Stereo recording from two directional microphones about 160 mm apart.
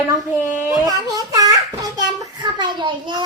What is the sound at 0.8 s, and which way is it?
A child's voice, 20° right (ahead or behind).